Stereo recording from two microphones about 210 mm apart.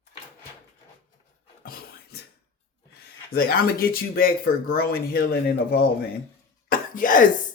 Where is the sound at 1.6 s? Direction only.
45° left (ahead or behind).